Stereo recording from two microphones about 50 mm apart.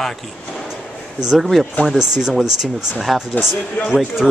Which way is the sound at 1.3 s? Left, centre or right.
Centre.